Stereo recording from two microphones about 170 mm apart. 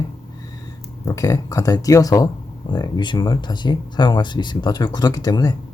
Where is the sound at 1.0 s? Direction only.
20° left (ahead or behind).